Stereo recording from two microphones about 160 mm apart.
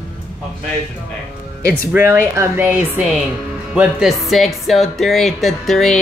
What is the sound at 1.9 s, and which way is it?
Speech, 15° right (ahead or behind).